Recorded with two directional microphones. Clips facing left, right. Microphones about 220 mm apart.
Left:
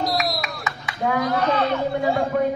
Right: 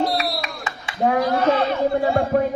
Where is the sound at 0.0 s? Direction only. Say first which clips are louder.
Right 2 dB; 30° right (ahead or behind).